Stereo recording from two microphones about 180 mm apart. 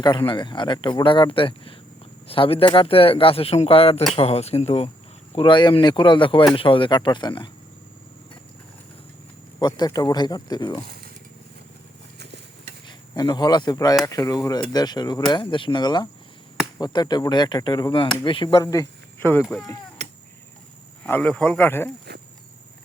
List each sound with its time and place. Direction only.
0.0 s speech: 25° left (ahead or behind)
9.6 s speech: 25° left (ahead or behind)
13.1 s speech: 20° left (ahead or behind)
21.0 s speech: 5° left (ahead or behind)